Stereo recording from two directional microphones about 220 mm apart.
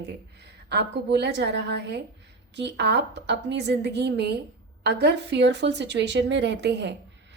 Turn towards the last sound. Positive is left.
turn(degrees=-50)  # may be behind; listen again after turning